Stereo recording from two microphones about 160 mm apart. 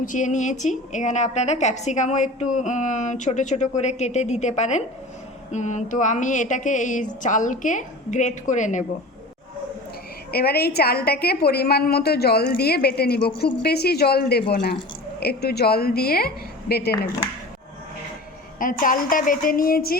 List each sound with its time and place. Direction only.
0.0 s a woman's voice: 50° left (ahead or behind)
10.3 s a woman's voice: 75° left (ahead or behind)
18.6 s a woman's voice: 60° left (ahead or behind)